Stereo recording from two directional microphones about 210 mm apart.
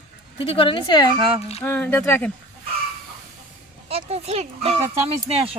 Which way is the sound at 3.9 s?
30° right (ahead or behind).